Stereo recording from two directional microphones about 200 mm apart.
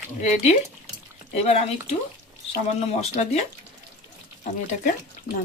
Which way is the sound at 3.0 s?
35° left (ahead or behind).